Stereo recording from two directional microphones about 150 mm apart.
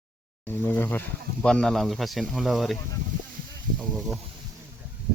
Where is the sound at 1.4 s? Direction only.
5° left (ahead or behind).